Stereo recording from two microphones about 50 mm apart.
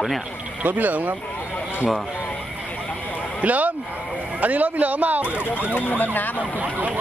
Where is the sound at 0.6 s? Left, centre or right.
Right.